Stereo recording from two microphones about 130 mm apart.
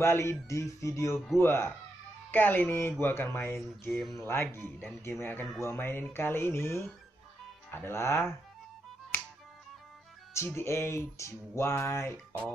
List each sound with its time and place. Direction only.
0.0 s music: 20° left (ahead or behind)
1.4 s speech: 20° left (ahead or behind)
3.9 s speech: centre (ahead or behind)
4.2 s speech: 15° left (ahead or behind)
7.7 s music: 20° left (ahead or behind)
10.3 s music: 20° left (ahead or behind)